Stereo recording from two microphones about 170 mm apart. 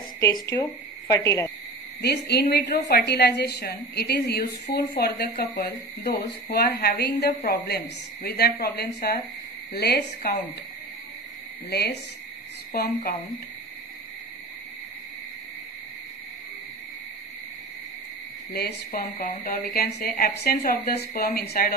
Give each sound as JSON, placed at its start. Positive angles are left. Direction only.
{"t": 0.2, "sound": "speech", "side_deg": 15}
{"t": 2.0, "sound": "speech", "side_deg": 75}
{"t": 11.7, "sound": "speech", "side_deg": 70}
{"t": 18.5, "sound": "speech", "side_deg": 65}